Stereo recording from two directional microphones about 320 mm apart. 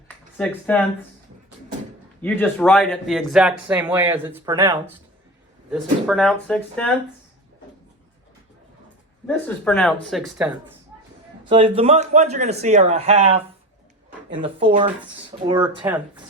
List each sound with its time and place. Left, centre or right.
0.3 s speech: centre
2.2 s speech: centre
5.7 s speech: centre
9.2 s speech: centre
11.4 s speech: centre
14.4 s speech: centre